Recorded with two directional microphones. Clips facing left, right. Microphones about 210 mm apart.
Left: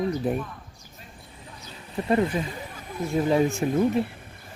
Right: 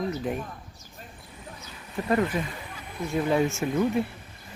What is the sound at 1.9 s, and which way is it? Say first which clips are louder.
Speech: left 2 dB; 25° left (ahead or behind).